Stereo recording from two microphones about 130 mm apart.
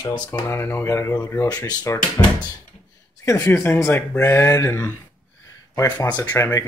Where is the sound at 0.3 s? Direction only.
20° left (ahead or behind).